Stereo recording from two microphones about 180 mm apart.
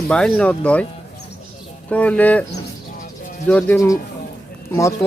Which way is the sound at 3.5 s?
10° left (ahead or behind).